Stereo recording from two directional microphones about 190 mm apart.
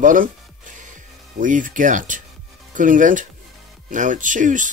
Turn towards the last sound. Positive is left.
turn(degrees=-40)  # may be behind; listen again after turning